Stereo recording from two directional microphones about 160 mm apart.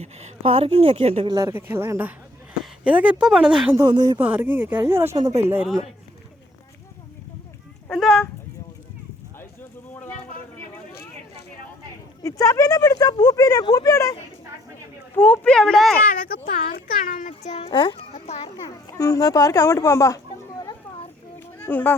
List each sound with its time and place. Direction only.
0.0 s a woman's voice: 40° right (ahead or behind)
1.3 s speech: 20° right (ahead or behind); by 3.8 s 5° right (ahead or behind)
3.8 s speech: 25° right (ahead or behind)
4.2 s speech: 10° right (ahead or behind)
7.9 s speech: 5° left (ahead or behind)
12.2 s speech: 20° left (ahead or behind); by 16.0 s centre (ahead or behind)
16.5 s a child's voice: 65° left (ahead or behind); by 17.7 s 45° left (ahead or behind)
17.7 s a child's voice: 30° left (ahead or behind)
18.4 s speech: 20° left (ahead or behind)
21.6 s speech: 15° left (ahead or behind)